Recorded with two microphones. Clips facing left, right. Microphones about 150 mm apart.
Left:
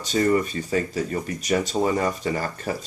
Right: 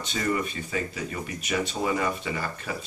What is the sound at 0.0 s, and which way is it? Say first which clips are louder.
Speech: left 7 dB; 40° left (ahead or behind).